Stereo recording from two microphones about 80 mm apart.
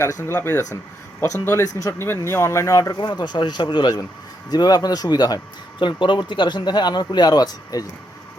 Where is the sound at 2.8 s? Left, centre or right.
Left.